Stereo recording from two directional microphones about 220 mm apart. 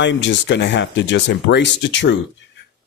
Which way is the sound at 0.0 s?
55° left (ahead or behind).